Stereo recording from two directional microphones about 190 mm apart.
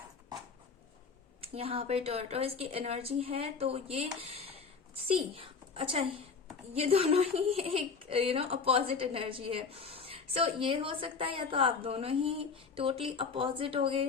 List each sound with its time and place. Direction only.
1.4 s a woman's voice: 30° right (ahead or behind)